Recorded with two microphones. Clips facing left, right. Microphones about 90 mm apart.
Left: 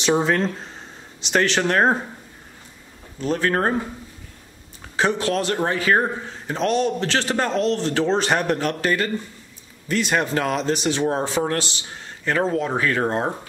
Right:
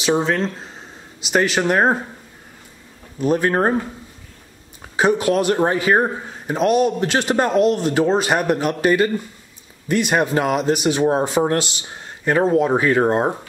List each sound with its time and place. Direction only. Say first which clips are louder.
0.0 s a man's voice: right 1 dB; centre (ahead or behind)
3.2 s a man's voice: right 4 dB; 15° right (ahead or behind)
4.9 s a man's voice: right 4 dB; 10° right (ahead or behind)